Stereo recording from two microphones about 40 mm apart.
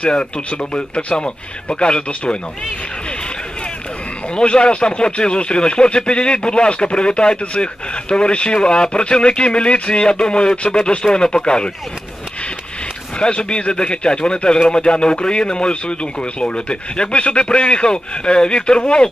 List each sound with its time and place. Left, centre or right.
0.0 s speech: left
4.4 s speech: left
13.2 s speech: left